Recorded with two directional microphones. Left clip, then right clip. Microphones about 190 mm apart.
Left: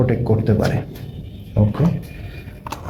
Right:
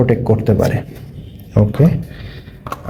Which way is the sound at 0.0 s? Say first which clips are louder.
Right 5 dB; 40° right (ahead or behind).